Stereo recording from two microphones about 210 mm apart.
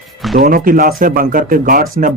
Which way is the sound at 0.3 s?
45° right (ahead or behind).